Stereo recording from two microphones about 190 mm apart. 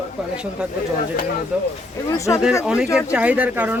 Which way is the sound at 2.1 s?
15° left (ahead or behind).